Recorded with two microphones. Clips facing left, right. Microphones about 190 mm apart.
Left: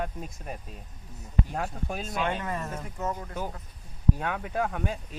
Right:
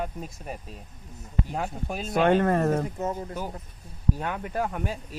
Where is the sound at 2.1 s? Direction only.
55° right (ahead or behind).